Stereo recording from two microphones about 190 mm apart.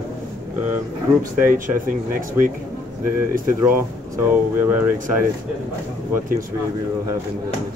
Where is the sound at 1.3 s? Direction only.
45° right (ahead or behind).